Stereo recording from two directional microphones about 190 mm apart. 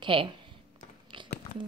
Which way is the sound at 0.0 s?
25° right (ahead or behind).